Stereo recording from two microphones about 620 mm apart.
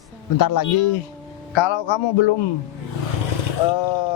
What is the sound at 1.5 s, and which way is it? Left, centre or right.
Speech, left.